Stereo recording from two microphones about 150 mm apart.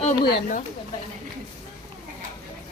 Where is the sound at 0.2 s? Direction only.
80° left.